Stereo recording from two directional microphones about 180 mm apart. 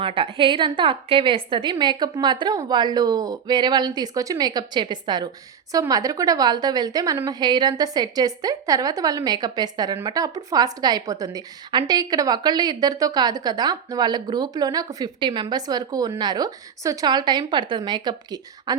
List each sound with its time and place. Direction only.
0.0 s a woman's voice: 30° right (ahead or behind)